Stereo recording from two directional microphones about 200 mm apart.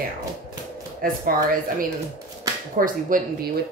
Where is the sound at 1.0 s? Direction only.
45° right (ahead or behind).